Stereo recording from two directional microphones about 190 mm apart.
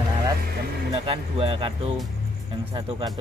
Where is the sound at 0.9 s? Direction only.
30° right (ahead or behind).